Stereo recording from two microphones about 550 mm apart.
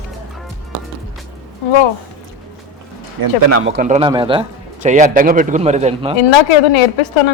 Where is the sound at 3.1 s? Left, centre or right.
Right.